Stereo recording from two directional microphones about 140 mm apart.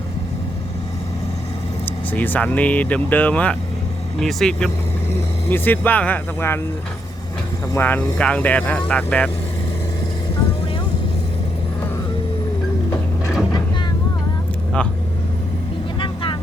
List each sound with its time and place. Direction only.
2.1 s speech: 10° left (ahead or behind)
5.5 s speech: 15° left (ahead or behind)
7.8 s speech: 10° left (ahead or behind)
16.0 s vehicle: 35° left (ahead or behind)